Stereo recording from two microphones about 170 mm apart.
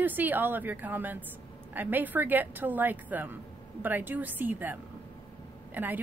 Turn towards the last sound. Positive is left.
turn(degrees=-10)  # may be behind; listen again after turning